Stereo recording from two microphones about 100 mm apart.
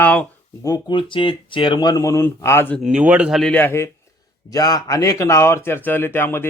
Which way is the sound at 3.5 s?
20° left (ahead or behind).